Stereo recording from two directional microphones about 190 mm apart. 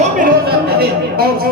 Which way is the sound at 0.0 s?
50° right (ahead or behind).